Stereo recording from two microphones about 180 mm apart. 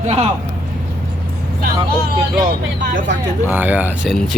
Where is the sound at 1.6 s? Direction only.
55° right (ahead or behind).